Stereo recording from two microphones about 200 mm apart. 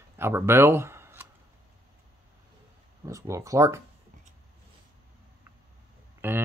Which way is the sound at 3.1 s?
15° right (ahead or behind).